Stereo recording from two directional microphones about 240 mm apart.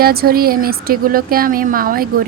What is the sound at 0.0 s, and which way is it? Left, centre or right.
Speech, right.